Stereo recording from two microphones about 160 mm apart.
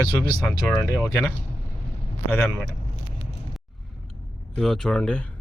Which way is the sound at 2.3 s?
15° left (ahead or behind).